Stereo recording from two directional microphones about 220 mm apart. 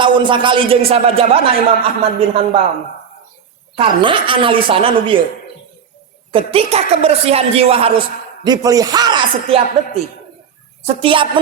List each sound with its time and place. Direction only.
0.0 s a woman's voice: 20° right (ahead or behind)
3.8 s a woman's voice: 25° right (ahead or behind)
6.3 s a woman's voice: 25° right (ahead or behind)